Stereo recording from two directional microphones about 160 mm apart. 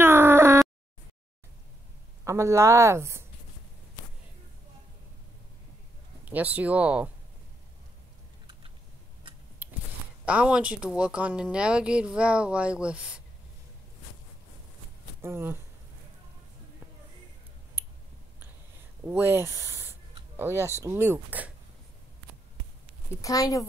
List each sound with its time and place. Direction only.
0.0 s a sound: 15° right (ahead or behind)
2.2 s speech: 20° right (ahead or behind)
6.3 s speech: 10° right (ahead or behind)
10.2 s speech: 5° right (ahead or behind)
15.2 s speech: 15° right (ahead or behind)
19.0 s speech: 15° right (ahead or behind)
23.2 s speech: 20° left (ahead or behind)